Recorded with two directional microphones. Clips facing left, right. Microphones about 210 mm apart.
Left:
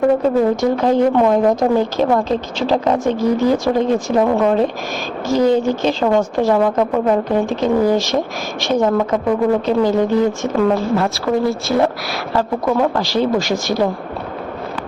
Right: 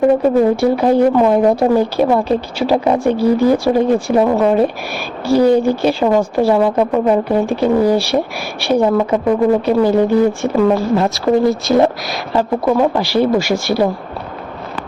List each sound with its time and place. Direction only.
0.2 s speech: 10° right (ahead or behind)